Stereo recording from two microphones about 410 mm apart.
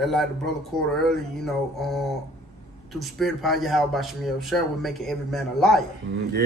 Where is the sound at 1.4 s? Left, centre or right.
Centre.